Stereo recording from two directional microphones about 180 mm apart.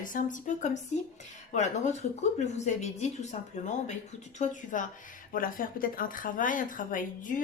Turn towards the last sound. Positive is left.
turn(degrees=45)  # may be behind; listen again after turning